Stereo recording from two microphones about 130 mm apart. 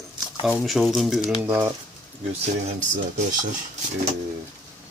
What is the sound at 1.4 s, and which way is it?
Speech, 20° right (ahead or behind).